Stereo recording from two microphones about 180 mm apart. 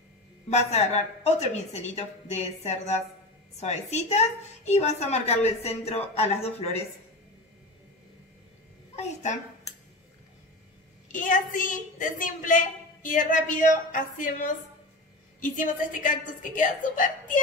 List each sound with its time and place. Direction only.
0.5 s speech: 35° left (ahead or behind)
8.9 s a woman's voice: 40° left (ahead or behind)
11.1 s a woman's voice: 45° left (ahead or behind)